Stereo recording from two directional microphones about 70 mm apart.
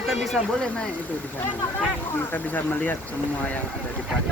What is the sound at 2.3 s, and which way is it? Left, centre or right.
Speech, left.